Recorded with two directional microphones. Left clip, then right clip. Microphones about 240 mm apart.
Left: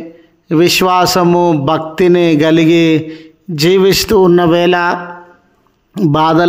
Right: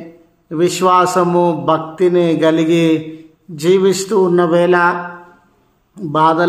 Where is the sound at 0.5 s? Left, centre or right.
Left.